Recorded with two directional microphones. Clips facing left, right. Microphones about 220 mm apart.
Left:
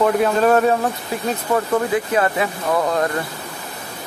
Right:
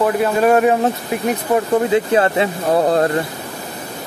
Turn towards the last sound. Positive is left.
turn(degrees=-35)  # may be behind; listen again after turning